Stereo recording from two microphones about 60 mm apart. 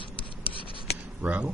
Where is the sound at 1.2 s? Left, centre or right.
Right.